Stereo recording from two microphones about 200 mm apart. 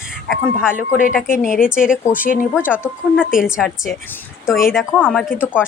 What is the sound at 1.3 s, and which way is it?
Speech, 40° left (ahead or behind).